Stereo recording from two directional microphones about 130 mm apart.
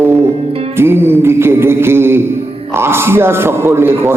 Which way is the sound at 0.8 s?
20° right (ahead or behind).